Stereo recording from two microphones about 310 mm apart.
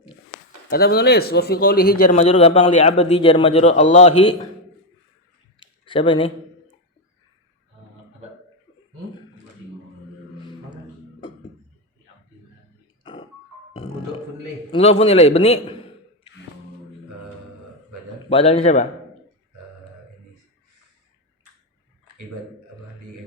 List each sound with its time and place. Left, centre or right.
0.7 s speech: left
5.5 s a sound: centre
14.7 s speech: centre
18.3 s speech: centre